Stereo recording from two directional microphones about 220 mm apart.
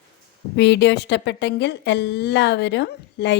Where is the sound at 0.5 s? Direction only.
50° left (ahead or behind).